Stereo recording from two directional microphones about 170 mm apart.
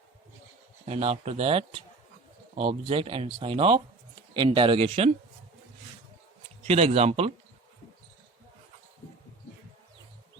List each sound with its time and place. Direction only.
0.9 s speech: 35° right (ahead or behind)
6.7 s speech: 35° right (ahead or behind)